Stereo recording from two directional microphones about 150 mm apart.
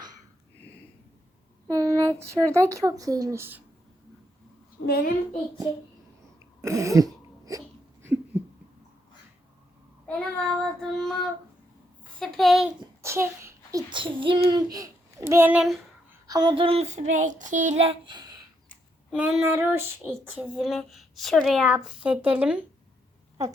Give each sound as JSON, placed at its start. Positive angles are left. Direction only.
{"t": 1.6, "sound": "speech", "side_deg": -20}
{"t": 4.9, "sound": "a child's voice", "side_deg": 90}
{"t": 6.6, "sound": "throat clearing", "side_deg": -20}
{"t": 8.0, "sound": "a sound", "side_deg": -10}
{"t": 10.1, "sound": "child singing", "side_deg": 5}
{"t": 12.2, "sound": "child singing", "side_deg": 0}
{"t": 13.0, "sound": "a child's voice", "side_deg": -20}
{"t": 13.9, "sound": "a child's voice", "side_deg": -35}
{"t": 16.2, "sound": "child singing", "side_deg": -25}
{"t": 19.1, "sound": "a sound", "side_deg": -10}